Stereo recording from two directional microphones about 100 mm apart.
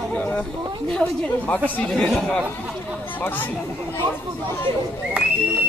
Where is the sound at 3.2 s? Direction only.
20° left (ahead or behind).